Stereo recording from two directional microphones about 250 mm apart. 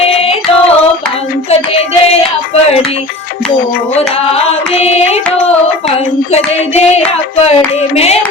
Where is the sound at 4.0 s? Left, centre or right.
Left.